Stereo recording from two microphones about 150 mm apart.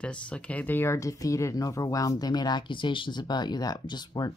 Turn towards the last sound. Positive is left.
turn(degrees=30)  # may be behind; listen again after turning